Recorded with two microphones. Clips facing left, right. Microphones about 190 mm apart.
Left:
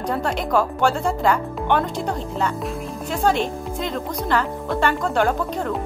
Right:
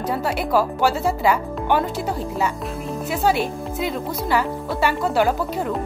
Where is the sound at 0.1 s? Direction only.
5° right (ahead or behind).